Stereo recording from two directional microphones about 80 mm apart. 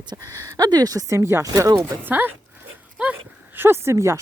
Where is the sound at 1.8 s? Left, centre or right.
Right.